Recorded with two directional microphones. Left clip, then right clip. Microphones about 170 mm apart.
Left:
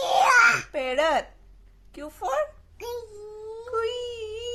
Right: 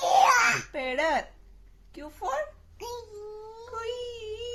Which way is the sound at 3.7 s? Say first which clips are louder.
Left 6 dB; 40° left (ahead or behind).